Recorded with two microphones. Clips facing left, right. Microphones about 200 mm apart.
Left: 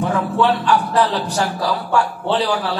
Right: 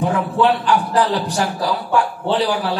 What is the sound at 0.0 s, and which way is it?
A man's voice, 15° right (ahead or behind).